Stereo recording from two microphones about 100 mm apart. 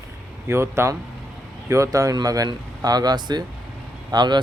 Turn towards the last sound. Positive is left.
turn(degrees=-45)  # may be behind; listen again after turning